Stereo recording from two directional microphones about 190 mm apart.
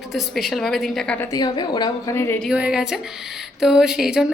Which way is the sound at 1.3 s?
20° left (ahead or behind).